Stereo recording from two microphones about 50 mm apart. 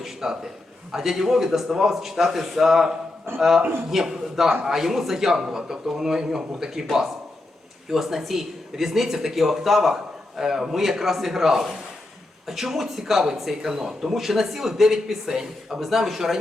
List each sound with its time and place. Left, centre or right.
0.0 s a sound: centre
0.9 s speech: centre
3.3 s a man's voice: right
3.8 s a man's voice: centre
7.9 s speech: centre